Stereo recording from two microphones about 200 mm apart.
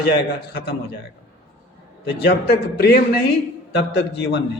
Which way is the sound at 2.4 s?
50° left (ahead or behind).